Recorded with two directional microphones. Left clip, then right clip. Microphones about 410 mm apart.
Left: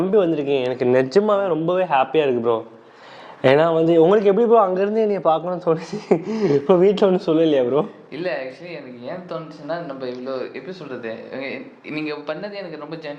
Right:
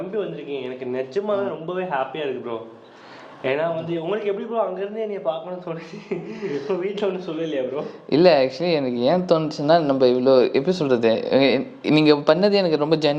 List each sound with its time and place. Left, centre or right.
0.2 s a man's voice: left
8.1 s speech: right